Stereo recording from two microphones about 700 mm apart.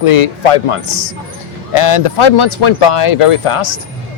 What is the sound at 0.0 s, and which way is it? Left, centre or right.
Speech, left.